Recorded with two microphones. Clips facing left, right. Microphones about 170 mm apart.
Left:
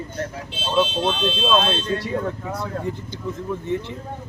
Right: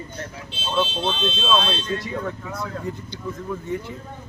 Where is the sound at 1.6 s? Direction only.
50° left (ahead or behind).